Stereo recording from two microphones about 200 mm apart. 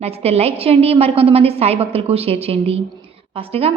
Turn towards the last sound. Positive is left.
turn(degrees=-30)  # may be behind; listen again after turning